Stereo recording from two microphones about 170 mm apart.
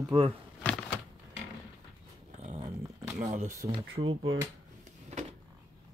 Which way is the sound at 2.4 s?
30° right (ahead or behind).